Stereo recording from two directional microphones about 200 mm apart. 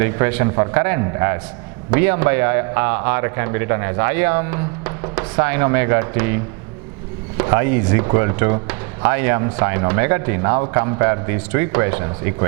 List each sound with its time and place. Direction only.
0.0 s speech: 15° right (ahead or behind)